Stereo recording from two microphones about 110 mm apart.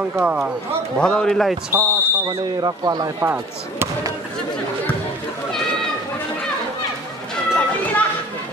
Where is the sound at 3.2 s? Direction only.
20° right (ahead or behind).